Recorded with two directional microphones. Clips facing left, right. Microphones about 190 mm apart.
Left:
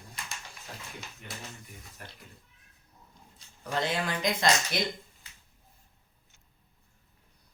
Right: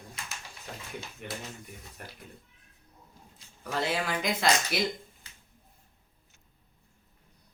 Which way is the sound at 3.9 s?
5° right (ahead or behind).